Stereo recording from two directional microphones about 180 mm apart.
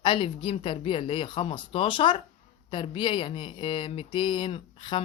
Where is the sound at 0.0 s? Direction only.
25° left (ahead or behind).